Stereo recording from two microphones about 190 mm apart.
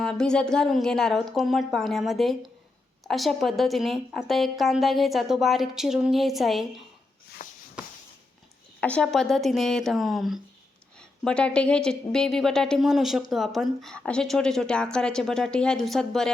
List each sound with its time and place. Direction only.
0.0 s a woman's voice: 5° left (ahead or behind)
7.4 s shuffle: 45° left (ahead or behind)
8.8 s a woman's voice: 5° left (ahead or behind)